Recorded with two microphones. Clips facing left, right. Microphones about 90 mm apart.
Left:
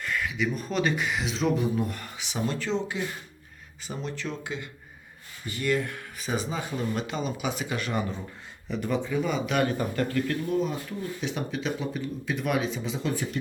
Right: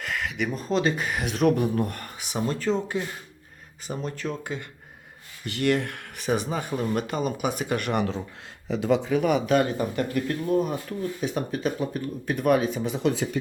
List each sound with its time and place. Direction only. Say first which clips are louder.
0.0 s a sound: even; 70° right (ahead or behind)
0.4 s speech: right 3 dB; 35° right (ahead or behind)
5.5 s speech: right 3 dB; 70° right (ahead or behind)
8.7 s speech: right 5 dB; 90° right; by 9.4 s 70° right (ahead or behind)
9.5 s speech: right 4 dB; 25° right (ahead or behind)
10.6 s speech: right 3 dB; 45° right (ahead or behind); by 13.2 s 70° right (ahead or behind)